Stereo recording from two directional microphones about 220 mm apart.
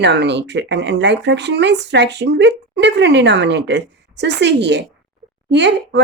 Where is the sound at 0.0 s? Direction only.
50° right (ahead or behind).